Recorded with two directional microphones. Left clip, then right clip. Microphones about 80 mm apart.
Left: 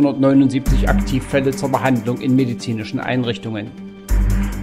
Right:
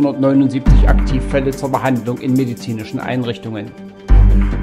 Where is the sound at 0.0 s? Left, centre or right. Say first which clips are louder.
Even; left.